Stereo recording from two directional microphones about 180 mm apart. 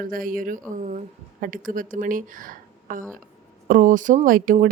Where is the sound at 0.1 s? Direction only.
50° right (ahead or behind).